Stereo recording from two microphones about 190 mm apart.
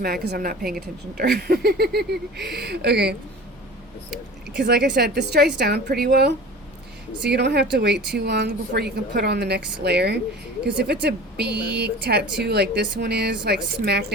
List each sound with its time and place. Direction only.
0.0 s a woman's voice: 55° right (ahead or behind)
4.5 s speech: 60° right (ahead or behind)